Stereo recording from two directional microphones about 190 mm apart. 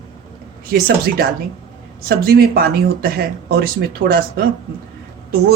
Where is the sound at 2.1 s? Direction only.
55° right (ahead or behind).